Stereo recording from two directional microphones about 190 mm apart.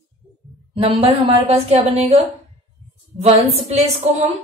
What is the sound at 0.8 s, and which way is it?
A woman's voice, 30° right (ahead or behind).